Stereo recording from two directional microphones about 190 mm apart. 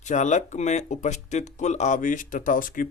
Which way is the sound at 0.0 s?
40° left (ahead or behind).